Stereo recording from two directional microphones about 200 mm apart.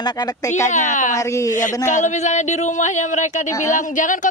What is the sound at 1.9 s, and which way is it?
Speech, 35° left (ahead or behind).